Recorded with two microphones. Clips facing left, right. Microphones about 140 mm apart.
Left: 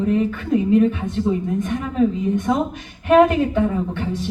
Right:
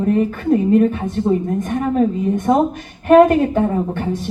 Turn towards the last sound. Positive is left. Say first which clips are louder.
# right 3 dB
turn(degrees=-45)  # may be behind; listen again after turning